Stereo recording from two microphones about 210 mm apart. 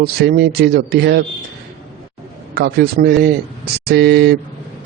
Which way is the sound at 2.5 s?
45° right (ahead or behind).